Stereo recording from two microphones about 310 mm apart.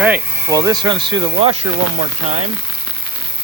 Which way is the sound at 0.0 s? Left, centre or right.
Centre.